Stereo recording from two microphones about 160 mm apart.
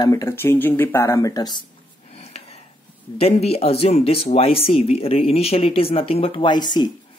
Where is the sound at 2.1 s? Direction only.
40° left (ahead or behind).